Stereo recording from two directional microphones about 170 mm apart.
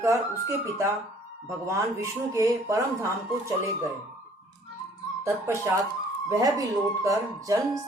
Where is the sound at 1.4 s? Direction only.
15° right (ahead or behind).